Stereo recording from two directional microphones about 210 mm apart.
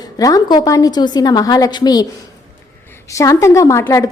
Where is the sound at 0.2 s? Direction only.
15° left (ahead or behind).